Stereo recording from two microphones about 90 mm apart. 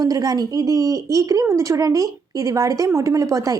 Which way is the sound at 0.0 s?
40° right (ahead or behind).